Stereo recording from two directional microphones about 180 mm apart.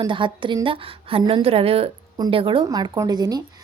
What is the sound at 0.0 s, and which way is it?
A woman's voice, 25° right (ahead or behind).